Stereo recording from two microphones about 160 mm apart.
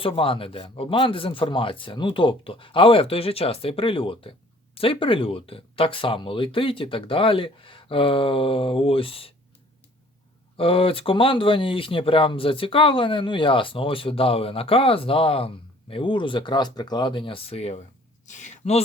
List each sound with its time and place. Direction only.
0.0 s speech: 35° left (ahead or behind)
10.6 s speech: 35° left (ahead or behind)